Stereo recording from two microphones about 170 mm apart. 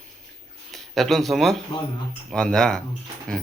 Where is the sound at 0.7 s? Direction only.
Centre (ahead or behind).